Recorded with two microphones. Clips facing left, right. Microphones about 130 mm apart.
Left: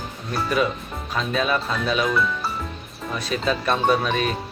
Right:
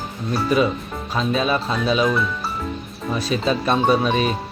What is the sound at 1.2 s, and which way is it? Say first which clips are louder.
Speech: right 2 dB; 25° right (ahead or behind).